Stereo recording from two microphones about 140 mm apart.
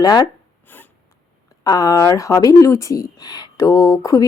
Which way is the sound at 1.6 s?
25° left (ahead or behind).